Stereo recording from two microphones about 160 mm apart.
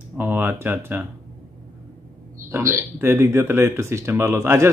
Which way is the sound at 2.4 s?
15° right (ahead or behind).